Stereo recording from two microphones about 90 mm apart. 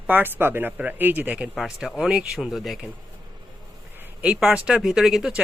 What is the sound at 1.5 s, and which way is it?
Speech, 5° right (ahead or behind).